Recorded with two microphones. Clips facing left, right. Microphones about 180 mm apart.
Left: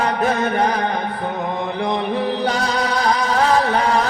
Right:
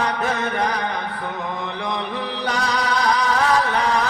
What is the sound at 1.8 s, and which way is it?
Mantra, 30° left (ahead or behind).